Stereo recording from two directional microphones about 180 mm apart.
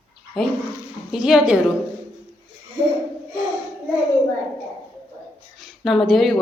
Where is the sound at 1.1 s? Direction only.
Centre (ahead or behind).